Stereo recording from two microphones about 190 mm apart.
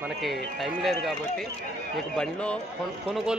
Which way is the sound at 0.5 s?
Centre (ahead or behind).